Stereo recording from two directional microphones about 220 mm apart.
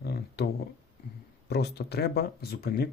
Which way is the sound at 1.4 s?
50° left (ahead or behind).